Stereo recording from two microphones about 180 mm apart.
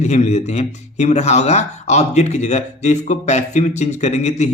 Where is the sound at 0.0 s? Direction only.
40° left (ahead or behind).